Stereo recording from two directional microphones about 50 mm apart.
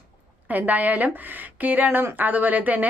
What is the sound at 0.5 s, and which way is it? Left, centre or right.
Speech, right.